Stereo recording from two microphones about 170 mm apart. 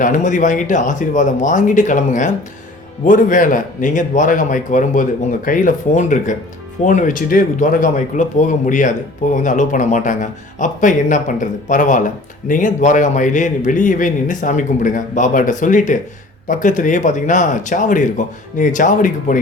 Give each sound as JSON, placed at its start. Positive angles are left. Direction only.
{"t": 0.0, "sound": "speech", "side_deg": 50}